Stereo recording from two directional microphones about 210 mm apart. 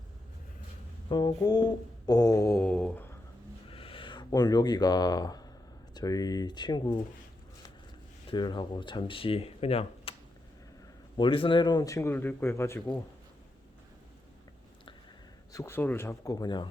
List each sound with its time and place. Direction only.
1.1 s a man's voice: 20° left (ahead or behind)
3.7 s a sound: 25° left (ahead or behind)
5.9 s speech: 20° left (ahead or behind)
8.3 s speech: 20° left (ahead or behind)
11.2 s a man's voice: 25° left (ahead or behind)
15.5 s a man's voice: 10° left (ahead or behind)